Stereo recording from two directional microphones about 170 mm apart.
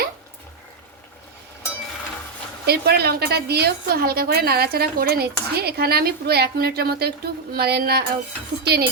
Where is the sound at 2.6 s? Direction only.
70° right (ahead or behind).